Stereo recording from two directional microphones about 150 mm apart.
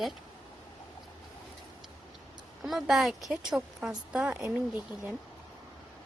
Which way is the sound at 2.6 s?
Centre (ahead or behind).